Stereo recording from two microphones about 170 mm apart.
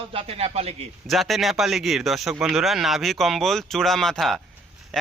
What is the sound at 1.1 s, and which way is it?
Speech, centre (ahead or behind).